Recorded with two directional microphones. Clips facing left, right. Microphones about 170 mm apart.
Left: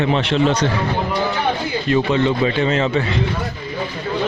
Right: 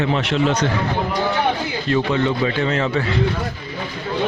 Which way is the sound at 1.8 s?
20° left (ahead or behind).